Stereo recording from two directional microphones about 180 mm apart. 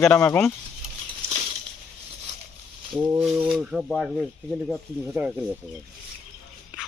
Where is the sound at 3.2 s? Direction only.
5° right (ahead or behind).